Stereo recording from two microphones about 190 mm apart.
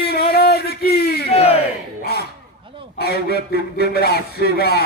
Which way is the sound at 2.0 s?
55° left (ahead or behind).